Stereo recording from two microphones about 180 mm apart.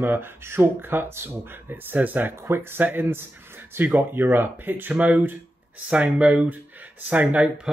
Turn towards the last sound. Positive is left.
turn(degrees=-10)  # may be behind; listen again after turning